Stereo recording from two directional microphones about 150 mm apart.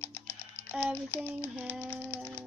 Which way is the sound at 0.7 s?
10° right (ahead or behind).